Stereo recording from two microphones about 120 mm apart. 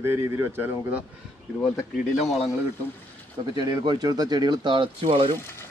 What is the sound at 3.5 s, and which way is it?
Speech, 35° right (ahead or behind).